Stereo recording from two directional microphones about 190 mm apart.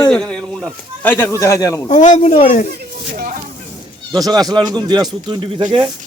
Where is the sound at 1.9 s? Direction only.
40° left (ahead or behind).